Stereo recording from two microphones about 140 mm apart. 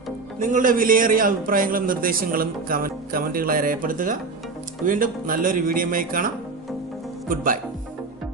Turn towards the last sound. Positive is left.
turn(degrees=-80)